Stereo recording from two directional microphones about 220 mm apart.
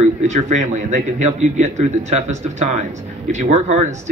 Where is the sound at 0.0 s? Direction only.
30° right (ahead or behind).